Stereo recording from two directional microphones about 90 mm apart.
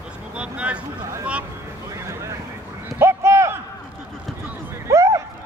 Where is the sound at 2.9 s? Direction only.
30° right (ahead or behind).